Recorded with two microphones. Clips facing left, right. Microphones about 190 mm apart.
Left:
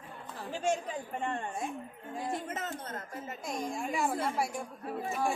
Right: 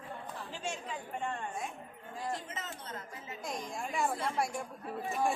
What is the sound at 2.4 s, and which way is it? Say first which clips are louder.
Speech: left 6 dB; 55° left (ahead or behind).